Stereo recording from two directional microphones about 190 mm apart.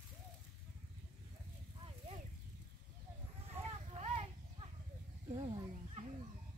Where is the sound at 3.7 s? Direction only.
35° right (ahead or behind).